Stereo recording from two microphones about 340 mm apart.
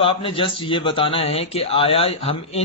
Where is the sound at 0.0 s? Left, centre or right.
Centre.